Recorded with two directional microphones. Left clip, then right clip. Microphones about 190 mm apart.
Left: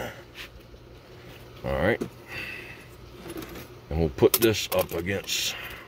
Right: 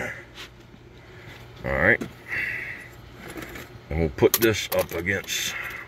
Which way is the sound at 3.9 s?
10° left (ahead or behind).